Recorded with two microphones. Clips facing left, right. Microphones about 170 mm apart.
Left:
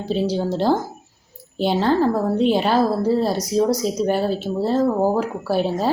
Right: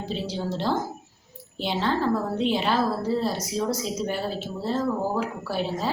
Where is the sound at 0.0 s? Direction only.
40° left (ahead or behind).